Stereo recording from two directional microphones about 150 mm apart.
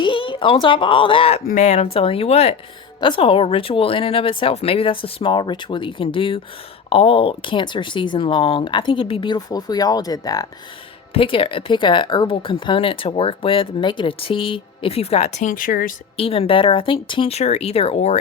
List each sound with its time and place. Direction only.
0.0 s a woman's voice: 35° left (ahead or behind)
1.5 s speech: 50° left (ahead or behind); by 10.4 s 25° left (ahead or behind)
11.1 s speech: 35° left (ahead or behind); by 16.0 s 70° left (ahead or behind)
16.1 s speech: 40° left (ahead or behind)